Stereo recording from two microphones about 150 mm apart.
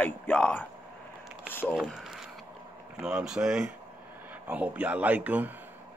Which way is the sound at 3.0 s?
5° right (ahead or behind).